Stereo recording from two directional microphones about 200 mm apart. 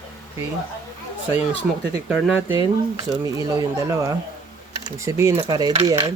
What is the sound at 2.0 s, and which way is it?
Speech, 5° right (ahead or behind).